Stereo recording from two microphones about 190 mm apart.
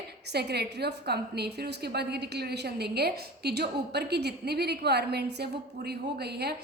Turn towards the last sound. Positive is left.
turn(degrees=-60)  # may be behind; listen again after turning